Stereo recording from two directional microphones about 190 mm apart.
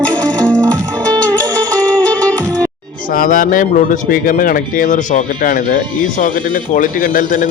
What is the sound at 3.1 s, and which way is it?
Speech, 45° left (ahead or behind).